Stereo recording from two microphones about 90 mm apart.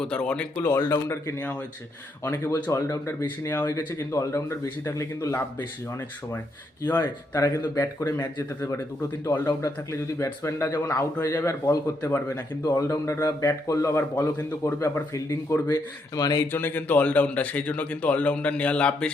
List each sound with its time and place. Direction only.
0.0 s speech: 10° left (ahead or behind)
0.9 s a man's voice: 30° left (ahead or behind)
3.9 s a man's voice: 35° left (ahead or behind)
5.5 s speech: 20° left (ahead or behind)
7.0 s a man's voice: 40° left (ahead or behind)
16.5 s speech: 25° left (ahead or behind)